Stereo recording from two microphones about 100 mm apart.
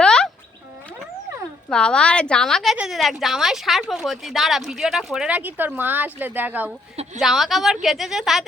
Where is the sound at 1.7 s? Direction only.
10° left (ahead or behind); by 6.7 s 15° right (ahead or behind).